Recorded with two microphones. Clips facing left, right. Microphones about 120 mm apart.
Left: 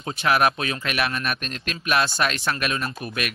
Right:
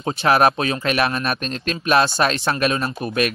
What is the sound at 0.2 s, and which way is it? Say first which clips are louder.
Speech: right 4 dB; 35° right (ahead or behind).